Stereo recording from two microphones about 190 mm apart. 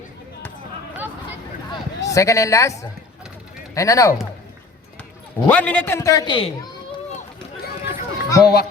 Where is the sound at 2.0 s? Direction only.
15° left (ahead or behind).